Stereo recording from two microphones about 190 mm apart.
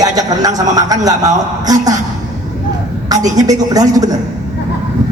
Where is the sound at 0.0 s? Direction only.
20° right (ahead or behind).